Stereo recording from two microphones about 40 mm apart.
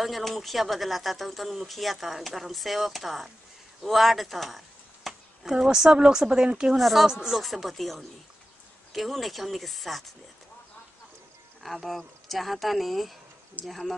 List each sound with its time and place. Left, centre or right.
0.0 s speech: centre
3.8 s a sound: centre
5.7 s speech: centre
6.8 s speech: centre
7.1 s speech: centre
7.4 s speech: centre
11.6 s speech: centre